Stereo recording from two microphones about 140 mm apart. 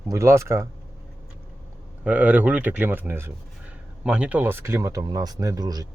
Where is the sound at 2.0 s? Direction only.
10° right (ahead or behind).